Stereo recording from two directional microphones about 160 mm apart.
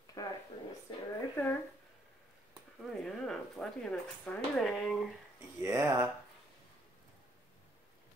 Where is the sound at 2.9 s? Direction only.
Centre (ahead or behind).